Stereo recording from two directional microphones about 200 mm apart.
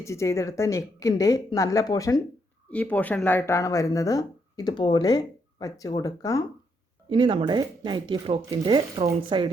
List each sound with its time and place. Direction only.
0.0 s speech: 15° left (ahead or behind)
2.6 s speech: 5° left (ahead or behind)
7.1 s speech: 25° right (ahead or behind)